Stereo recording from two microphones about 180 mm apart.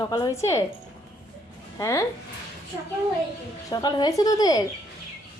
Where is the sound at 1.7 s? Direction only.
20° left (ahead or behind).